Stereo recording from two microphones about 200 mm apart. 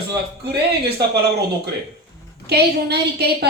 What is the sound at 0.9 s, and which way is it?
Speech, 55° right (ahead or behind).